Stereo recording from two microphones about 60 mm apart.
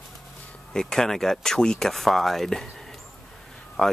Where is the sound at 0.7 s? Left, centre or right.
Centre.